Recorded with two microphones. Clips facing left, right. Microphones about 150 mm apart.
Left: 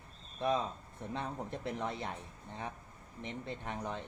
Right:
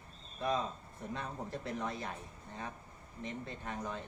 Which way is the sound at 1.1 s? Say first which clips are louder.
Left 2 dB; 20° left (ahead or behind).